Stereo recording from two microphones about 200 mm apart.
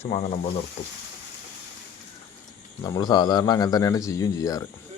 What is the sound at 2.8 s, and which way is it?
Speech, 20° left (ahead or behind).